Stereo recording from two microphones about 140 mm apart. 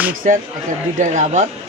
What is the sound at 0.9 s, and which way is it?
Speech, 65° right (ahead or behind).